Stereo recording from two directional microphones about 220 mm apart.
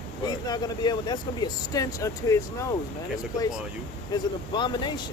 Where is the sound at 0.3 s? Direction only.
20° left (ahead or behind).